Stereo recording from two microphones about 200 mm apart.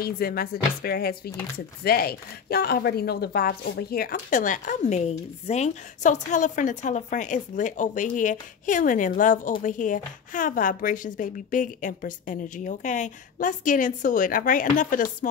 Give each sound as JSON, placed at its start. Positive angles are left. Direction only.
{"t": 0.0, "sound": "speech", "side_deg": 50}